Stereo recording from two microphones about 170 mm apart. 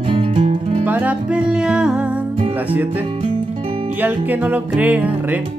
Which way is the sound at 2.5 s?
10° right (ahead or behind).